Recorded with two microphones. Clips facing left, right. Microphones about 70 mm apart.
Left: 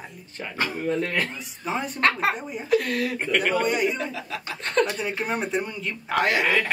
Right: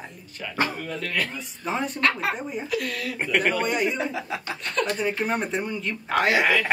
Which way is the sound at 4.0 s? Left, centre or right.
Centre.